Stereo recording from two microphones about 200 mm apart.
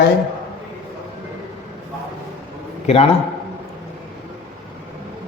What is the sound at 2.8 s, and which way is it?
Speech, 30° left (ahead or behind).